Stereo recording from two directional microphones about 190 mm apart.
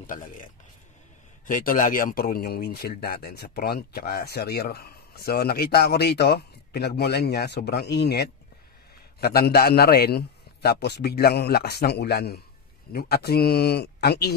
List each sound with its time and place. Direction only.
0.0 s a man's voice: 45° left (ahead or behind)
1.5 s speech: 45° left (ahead or behind)